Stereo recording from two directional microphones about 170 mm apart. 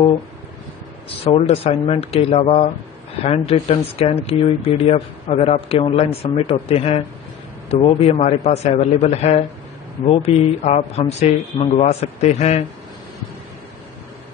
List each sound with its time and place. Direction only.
1.0 s speech: 35° left (ahead or behind)